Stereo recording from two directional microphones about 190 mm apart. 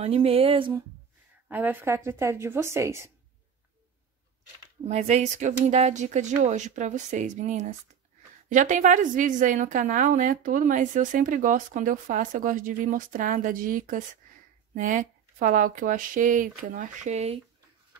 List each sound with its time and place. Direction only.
0.0 s speech: 30° right (ahead or behind)
1.5 s a woman's voice: 10° right (ahead or behind)
4.8 s a woman's voice: 35° right (ahead or behind)